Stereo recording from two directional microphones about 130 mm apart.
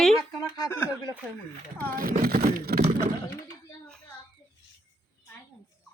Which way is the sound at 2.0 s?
90° right.